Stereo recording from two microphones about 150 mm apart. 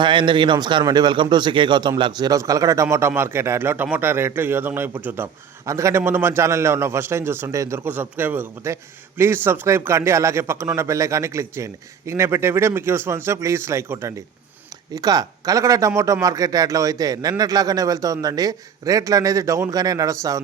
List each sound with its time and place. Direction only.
0.0 s a man's voice: 30° right (ahead or behind)